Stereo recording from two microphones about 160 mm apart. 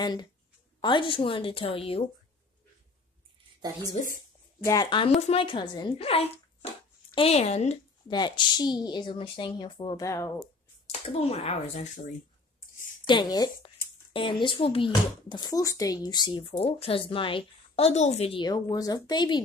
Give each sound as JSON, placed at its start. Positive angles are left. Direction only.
{"t": 0.0, "sound": "speech", "side_deg": 25}
{"t": 3.9, "sound": "a sound", "side_deg": 55}
{"t": 4.8, "sound": "speech", "side_deg": 30}
{"t": 8.1, "sound": "speech", "side_deg": 25}
{"t": 10.0, "sound": "speech", "side_deg": 20}
{"t": 10.9, "sound": "speech", "side_deg": 40}
{"t": 13.0, "sound": "a woman's voice", "side_deg": 25}